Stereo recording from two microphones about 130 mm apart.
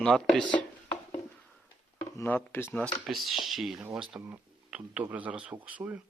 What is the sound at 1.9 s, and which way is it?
Speech, 15° left (ahead or behind).